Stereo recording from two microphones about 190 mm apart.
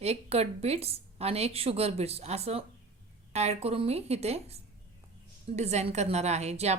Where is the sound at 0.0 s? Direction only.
35° right (ahead or behind).